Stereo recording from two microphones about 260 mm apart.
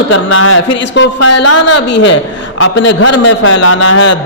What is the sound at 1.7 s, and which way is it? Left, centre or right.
A man's voice, left.